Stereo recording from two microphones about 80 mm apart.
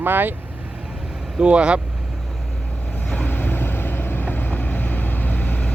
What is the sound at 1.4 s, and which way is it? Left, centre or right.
Speech, centre.